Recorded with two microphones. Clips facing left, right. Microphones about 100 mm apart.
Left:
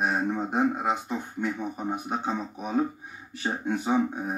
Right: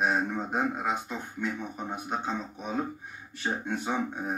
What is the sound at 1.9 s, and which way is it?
Speech, 10° left (ahead or behind).